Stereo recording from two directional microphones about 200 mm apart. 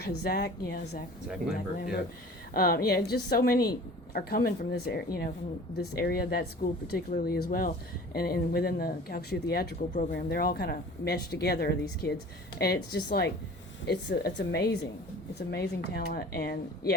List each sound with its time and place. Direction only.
0.0 s speech: 55° left (ahead or behind)
2.5 s speech: 50° left (ahead or behind)